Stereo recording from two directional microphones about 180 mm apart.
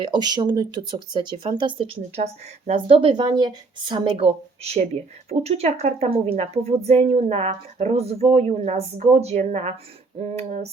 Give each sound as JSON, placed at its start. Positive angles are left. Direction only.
{"t": 0.0, "sound": "speech", "side_deg": -25}
{"t": 4.6, "sound": "a woman's voice", "side_deg": -35}